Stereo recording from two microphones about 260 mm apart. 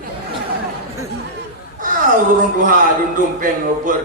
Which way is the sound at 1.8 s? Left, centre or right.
Right.